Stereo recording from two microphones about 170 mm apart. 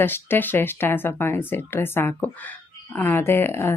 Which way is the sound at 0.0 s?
10° left (ahead or behind).